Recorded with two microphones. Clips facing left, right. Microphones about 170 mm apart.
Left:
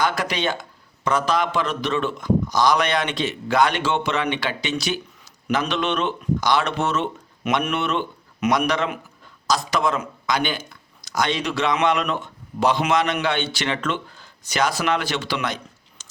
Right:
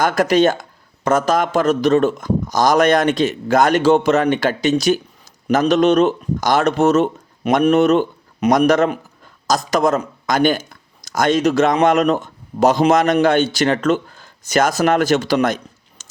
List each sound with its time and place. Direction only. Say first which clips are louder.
0.0 s a man's voice: right 9 dB; 45° right (ahead or behind)